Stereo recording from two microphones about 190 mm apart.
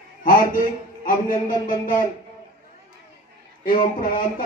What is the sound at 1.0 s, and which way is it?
A man's voice, 45° left (ahead or behind).